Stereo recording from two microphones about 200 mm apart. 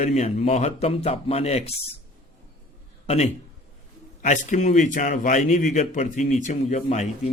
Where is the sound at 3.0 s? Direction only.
30° left (ahead or behind).